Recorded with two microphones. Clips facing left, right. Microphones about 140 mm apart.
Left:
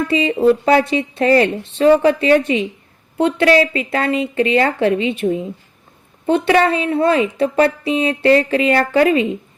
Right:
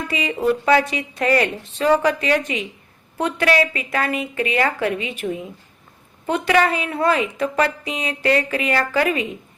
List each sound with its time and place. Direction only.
0.1 s a woman's voice: 30° left (ahead or behind)